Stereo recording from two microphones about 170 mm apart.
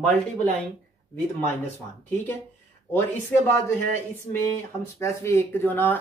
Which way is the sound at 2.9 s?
10° left (ahead or behind).